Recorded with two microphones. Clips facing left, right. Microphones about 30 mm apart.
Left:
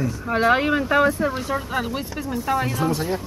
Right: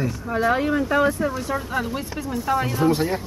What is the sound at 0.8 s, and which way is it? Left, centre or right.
Speech, left.